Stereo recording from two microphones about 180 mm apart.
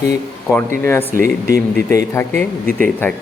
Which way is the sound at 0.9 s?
10° left (ahead or behind).